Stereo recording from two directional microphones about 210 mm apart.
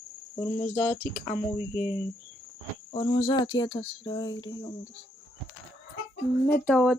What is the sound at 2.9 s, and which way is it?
Speech, 25° left (ahead or behind).